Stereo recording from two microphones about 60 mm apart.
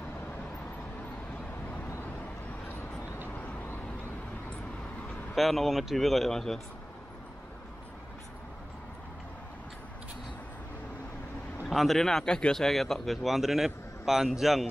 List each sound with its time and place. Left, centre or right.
3.3 s vehicle: left
5.3 s a man's voice: centre
11.7 s a man's voice: centre